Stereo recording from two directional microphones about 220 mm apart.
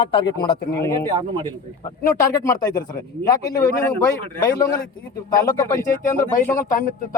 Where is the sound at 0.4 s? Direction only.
20° left (ahead or behind).